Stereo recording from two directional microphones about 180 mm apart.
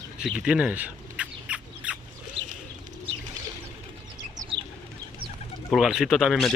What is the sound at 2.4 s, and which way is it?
Bird, 90° right.